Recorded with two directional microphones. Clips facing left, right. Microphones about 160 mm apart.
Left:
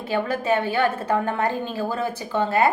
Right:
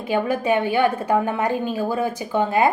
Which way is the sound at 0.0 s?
15° right (ahead or behind).